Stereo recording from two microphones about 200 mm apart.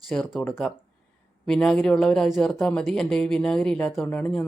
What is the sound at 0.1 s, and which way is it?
Speech, centre (ahead or behind).